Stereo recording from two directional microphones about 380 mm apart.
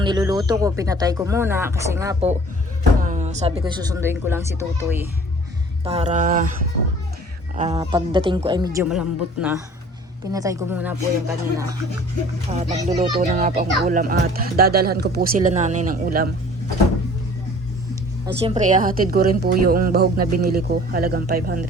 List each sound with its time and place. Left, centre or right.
0.0 s speech: centre
7.5 s speech: centre
18.3 s speech: centre